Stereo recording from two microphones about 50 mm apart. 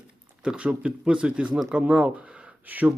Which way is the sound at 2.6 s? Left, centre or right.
Right.